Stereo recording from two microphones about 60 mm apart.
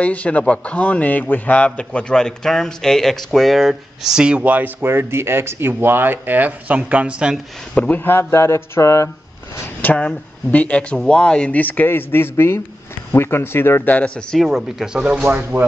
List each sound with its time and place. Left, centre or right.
0.0 s a man's voice: left; by 4.6 s right
4.8 s speech: right; by 7.3 s centre
7.9 s speech: left
9.9 s speech: left
13.8 s speech: left
14.3 s speech: centre